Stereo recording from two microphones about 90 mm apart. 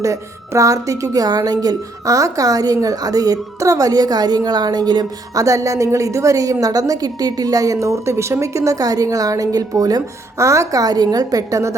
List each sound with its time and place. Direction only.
0.0 s a woman's voice: 35° right (ahead or behind)